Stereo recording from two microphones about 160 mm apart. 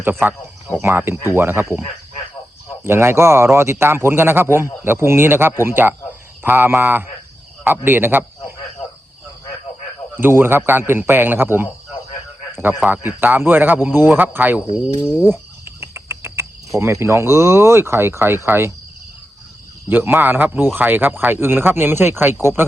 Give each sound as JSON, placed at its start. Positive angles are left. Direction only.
{"t": 0.0, "sound": "a man's voice", "side_deg": -15}
{"t": 2.8, "sound": "a man's voice", "side_deg": -15}
{"t": 10.2, "sound": "a man's voice", "side_deg": -15}
{"t": 15.8, "sound": "cricket", "side_deg": -15}
{"t": 18.4, "sound": "a man's voice", "side_deg": -15}
{"t": 19.9, "sound": "a man's voice", "side_deg": -10}